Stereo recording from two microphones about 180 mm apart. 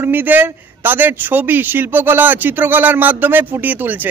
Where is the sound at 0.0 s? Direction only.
10° right (ahead or behind).